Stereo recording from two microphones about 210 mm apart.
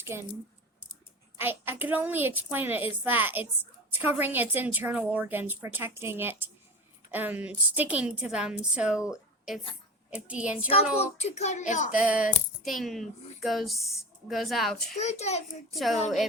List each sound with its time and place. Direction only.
0.0 s speech: 10° right (ahead or behind)
1.4 s a woman's voice: 10° right (ahead or behind)
10.2 s a woman's voice: 5° right (ahead or behind)
10.9 s child singing: 30° left (ahead or behind)
11.9 s a woman's voice: 5° right (ahead or behind)
14.9 s child singing: 30° left (ahead or behind)